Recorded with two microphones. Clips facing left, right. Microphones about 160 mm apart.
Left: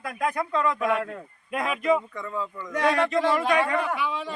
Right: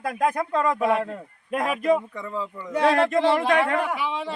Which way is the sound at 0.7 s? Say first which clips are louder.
Right 3 dB; 30° right (ahead or behind).